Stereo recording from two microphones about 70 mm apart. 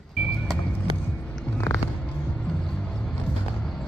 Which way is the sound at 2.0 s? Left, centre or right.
Centre.